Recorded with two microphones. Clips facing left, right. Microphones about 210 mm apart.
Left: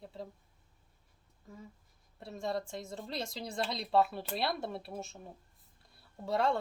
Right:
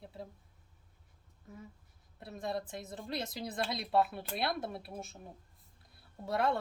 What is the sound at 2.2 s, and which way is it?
A woman's voice, centre (ahead or behind).